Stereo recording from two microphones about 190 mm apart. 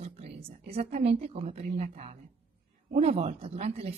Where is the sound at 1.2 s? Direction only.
35° right (ahead or behind).